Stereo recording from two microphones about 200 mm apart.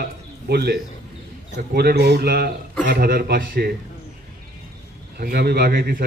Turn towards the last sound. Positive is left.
turn(degrees=-50)  # may be behind; listen again after turning